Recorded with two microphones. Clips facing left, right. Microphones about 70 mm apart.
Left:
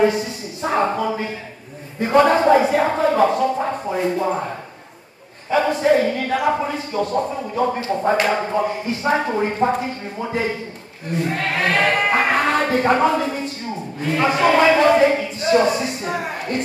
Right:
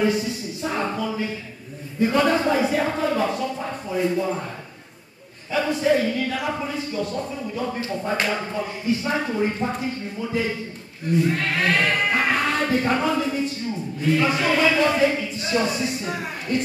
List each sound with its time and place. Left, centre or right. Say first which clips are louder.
0.0 s speech: left 4 dB; left
5.5 s speech: left 4 dB; left